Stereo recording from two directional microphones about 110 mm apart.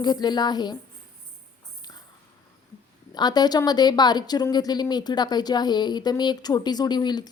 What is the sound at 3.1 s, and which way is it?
A woman's voice, 40° left (ahead or behind).